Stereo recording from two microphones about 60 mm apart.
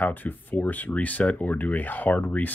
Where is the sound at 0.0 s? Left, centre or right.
Left.